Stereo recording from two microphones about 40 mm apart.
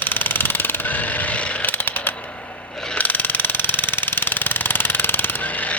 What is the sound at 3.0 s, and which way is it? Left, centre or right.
Jackhammer, left.